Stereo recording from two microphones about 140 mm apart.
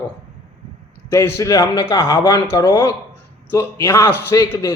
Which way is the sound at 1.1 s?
20° left (ahead or behind).